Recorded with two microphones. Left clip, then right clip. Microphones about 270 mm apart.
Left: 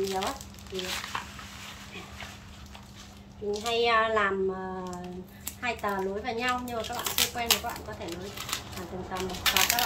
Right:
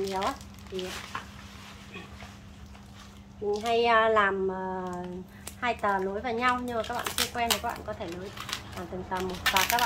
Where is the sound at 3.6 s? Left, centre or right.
Centre.